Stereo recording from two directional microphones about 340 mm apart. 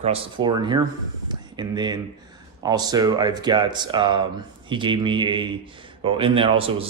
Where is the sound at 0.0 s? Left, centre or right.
Centre.